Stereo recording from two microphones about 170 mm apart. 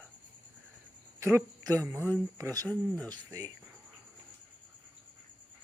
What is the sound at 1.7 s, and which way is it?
Speech, 15° right (ahead or behind).